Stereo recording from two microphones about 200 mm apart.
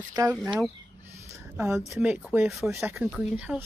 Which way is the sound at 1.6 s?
5° right (ahead or behind).